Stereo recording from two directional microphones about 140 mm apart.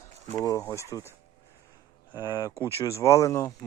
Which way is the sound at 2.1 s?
25° left (ahead or behind).